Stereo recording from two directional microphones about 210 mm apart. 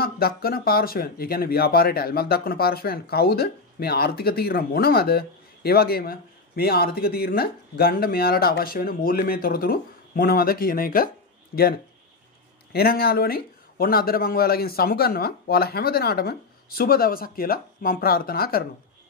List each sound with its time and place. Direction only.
0.0 s speech: 45° left (ahead or behind)
12.7 s speech: 45° left (ahead or behind)